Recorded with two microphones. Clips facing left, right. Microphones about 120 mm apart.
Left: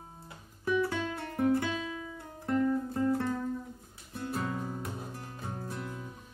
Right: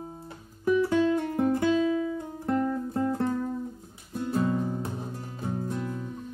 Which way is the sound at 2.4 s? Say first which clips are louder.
Right 1 dB; 20° right (ahead or behind).